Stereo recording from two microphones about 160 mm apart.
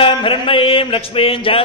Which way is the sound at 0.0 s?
35° left (ahead or behind).